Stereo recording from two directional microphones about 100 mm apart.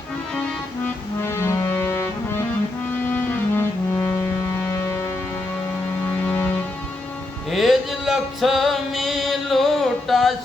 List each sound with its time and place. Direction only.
1.2 s music: 25° left (ahead or behind)
6.1 s music: 20° left (ahead or behind)
7.5 s music: centre (ahead or behind)